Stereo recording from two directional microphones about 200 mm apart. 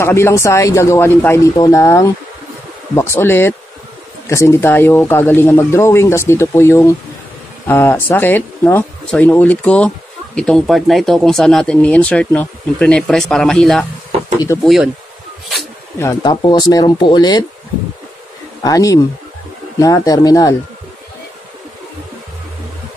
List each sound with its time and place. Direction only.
0.0 s speech: 15° left (ahead or behind)
16.0 s speech: 20° left (ahead or behind)
18.6 s speech: 15° left (ahead or behind)